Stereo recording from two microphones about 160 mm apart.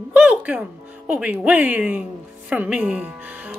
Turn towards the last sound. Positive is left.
turn(degrees=-10)  # may be behind; listen again after turning